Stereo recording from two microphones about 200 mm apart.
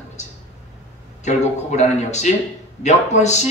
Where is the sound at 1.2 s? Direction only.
35° left (ahead or behind).